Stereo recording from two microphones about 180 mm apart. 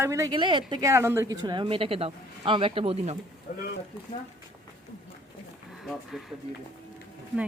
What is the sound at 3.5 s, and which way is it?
Speech, 40° left (ahead or behind).